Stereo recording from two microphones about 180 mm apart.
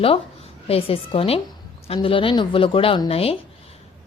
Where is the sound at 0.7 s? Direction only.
30° left (ahead or behind).